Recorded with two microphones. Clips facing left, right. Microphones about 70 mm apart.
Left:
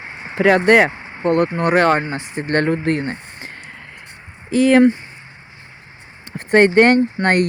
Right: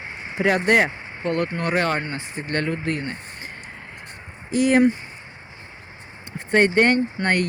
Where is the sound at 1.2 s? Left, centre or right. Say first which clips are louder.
Left 7 dB; left.